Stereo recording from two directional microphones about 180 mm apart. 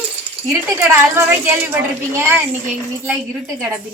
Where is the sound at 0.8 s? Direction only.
15° right (ahead or behind).